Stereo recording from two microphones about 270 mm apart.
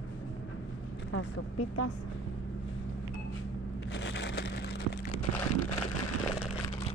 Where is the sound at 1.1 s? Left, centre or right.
Left.